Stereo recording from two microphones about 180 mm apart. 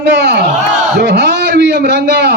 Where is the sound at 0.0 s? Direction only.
70° right (ahead or behind).